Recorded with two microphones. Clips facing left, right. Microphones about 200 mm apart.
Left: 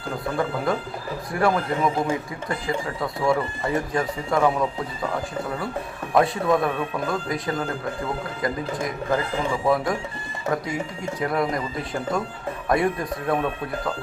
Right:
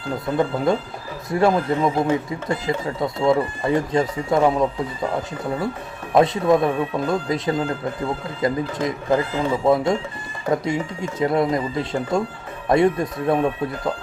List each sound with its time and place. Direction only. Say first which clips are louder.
0.3 s speech: right 5 dB; 25° right (ahead or behind)
6.1 s speech: right 4 dB; 20° right (ahead or behind)